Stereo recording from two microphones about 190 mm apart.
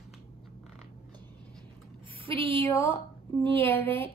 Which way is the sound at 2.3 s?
30° right (ahead or behind).